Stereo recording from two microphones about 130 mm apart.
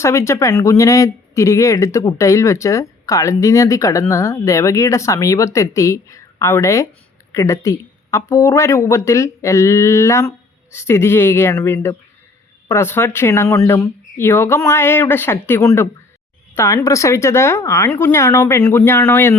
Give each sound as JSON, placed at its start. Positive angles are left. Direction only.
{"t": 0.0, "sound": "speech", "side_deg": 20}